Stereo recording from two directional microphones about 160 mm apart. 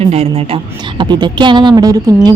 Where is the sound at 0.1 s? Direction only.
40° right (ahead or behind).